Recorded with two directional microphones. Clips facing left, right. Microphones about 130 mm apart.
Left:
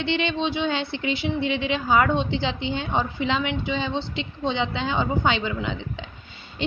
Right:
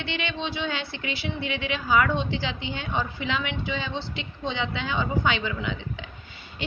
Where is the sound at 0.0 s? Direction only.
25° left (ahead or behind).